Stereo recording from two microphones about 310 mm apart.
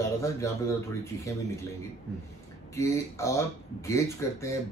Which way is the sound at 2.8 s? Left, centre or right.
Centre.